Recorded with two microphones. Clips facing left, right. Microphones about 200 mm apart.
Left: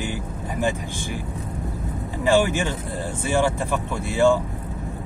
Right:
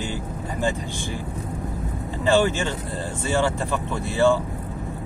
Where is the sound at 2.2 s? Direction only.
15° left (ahead or behind).